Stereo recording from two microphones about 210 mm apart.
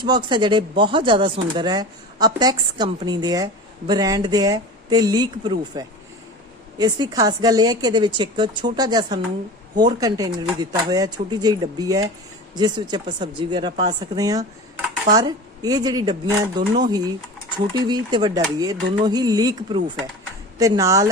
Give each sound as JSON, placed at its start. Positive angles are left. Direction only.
{"t": 0.0, "sound": "speech", "side_deg": -20}